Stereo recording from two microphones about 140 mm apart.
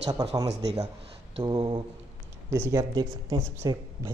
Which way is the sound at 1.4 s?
35° right (ahead or behind).